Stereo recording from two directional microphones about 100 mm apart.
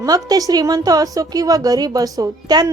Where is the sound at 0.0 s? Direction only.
40° right (ahead or behind).